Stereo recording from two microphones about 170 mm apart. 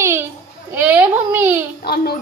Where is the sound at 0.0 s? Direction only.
15° right (ahead or behind).